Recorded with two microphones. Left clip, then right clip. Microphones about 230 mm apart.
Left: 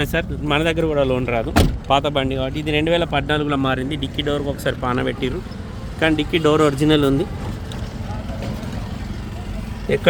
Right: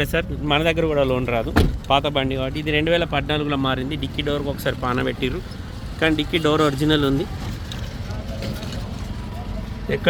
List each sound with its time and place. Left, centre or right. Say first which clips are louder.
0.0 s speech: left 1 dB; centre